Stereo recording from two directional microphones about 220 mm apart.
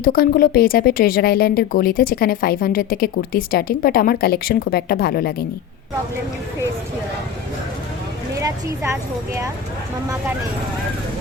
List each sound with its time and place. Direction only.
0.0 s speech: 40° left (ahead or behind)
8.4 s a woman's voice: 15° right (ahead or behind)